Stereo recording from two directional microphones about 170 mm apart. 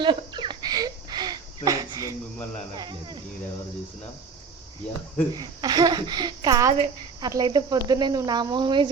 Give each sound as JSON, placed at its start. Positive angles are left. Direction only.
{"t": 0.0, "sound": "a sound", "side_deg": -25}
{"t": 2.7, "sound": "cricket", "side_deg": -25}
{"t": 5.3, "sound": "speech", "side_deg": -20}